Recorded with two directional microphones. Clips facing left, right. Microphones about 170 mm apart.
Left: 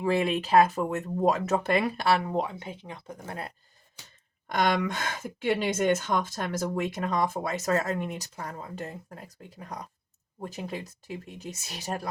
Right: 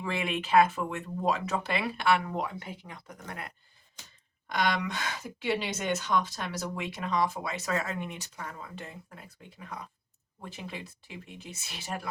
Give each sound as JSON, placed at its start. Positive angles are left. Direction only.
{"t": 0.0, "sound": "speech", "side_deg": 35}
{"t": 4.4, "sound": "speech", "side_deg": 50}